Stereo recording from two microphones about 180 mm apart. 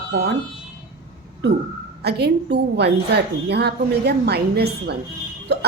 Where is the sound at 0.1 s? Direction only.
70° right (ahead or behind).